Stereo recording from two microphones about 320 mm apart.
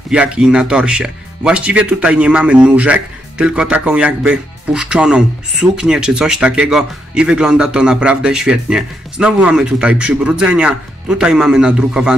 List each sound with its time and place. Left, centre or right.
0.1 s speech: centre